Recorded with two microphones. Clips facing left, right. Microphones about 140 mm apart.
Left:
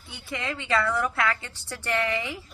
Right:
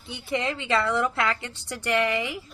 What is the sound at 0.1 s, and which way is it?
A woman's voice, 20° right (ahead or behind).